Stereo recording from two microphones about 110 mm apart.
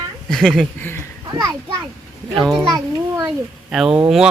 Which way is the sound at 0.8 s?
20° left (ahead or behind).